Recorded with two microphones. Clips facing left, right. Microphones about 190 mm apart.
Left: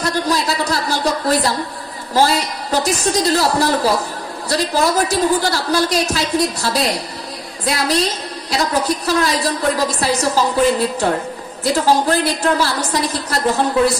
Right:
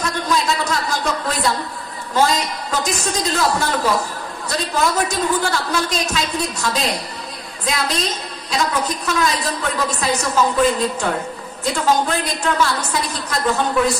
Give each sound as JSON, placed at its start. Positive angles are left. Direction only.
{"t": 0.0, "sound": "a sound", "side_deg": 35}
{"t": 2.1, "sound": "a woman's voice", "side_deg": 35}
{"t": 11.6, "sound": "a woman's voice", "side_deg": 35}